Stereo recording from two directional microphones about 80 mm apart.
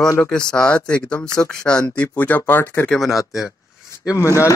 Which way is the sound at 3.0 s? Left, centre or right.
Centre.